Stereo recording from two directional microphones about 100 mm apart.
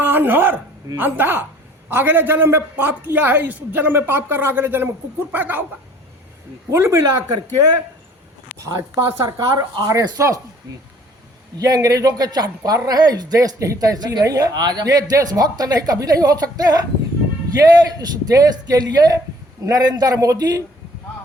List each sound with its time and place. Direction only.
0.0 s a woman's voice: 20° right (ahead or behind)
6.7 s a man's voice: 25° right (ahead or behind)
8.6 s speech: 35° right (ahead or behind)
11.5 s speech: 35° right (ahead or behind)